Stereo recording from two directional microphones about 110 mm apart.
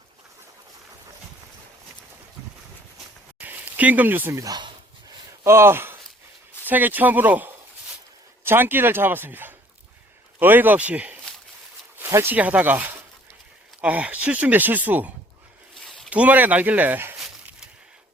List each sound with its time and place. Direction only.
3.4 s speech: 15° right (ahead or behind)
15.8 s a sound: centre (ahead or behind)
16.0 s speech: 10° right (ahead or behind)